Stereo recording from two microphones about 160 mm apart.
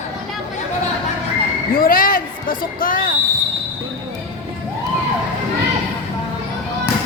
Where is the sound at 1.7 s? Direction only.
65° left (ahead or behind).